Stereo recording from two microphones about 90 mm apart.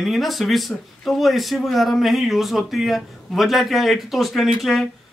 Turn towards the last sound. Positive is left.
turn(degrees=0)  # may be behind; listen again after turning